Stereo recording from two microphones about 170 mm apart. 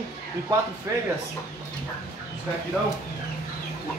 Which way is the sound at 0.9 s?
15° right (ahead or behind).